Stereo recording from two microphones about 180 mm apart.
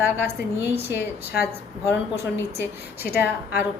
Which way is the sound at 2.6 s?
60° left (ahead or behind).